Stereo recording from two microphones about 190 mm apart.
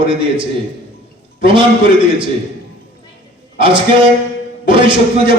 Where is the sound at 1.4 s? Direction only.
25° right (ahead or behind).